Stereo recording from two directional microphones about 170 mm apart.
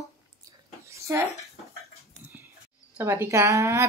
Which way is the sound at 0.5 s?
15° right (ahead or behind).